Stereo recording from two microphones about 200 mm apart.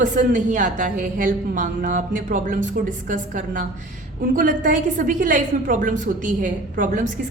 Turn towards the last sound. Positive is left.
turn(degrees=-40)  # may be behind; listen again after turning